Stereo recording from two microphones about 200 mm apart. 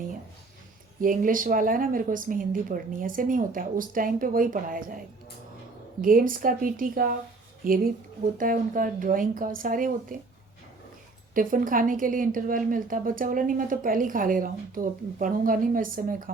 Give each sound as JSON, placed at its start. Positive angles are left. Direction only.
{"t": 1.0, "sound": "a woman's voice", "side_deg": -45}
{"t": 6.0, "sound": "a woman's voice", "side_deg": -45}
{"t": 11.3, "sound": "a woman's voice", "side_deg": -45}